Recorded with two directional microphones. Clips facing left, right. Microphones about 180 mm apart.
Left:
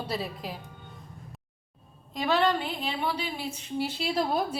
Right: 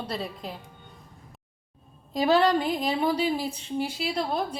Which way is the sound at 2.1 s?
35° right (ahead or behind).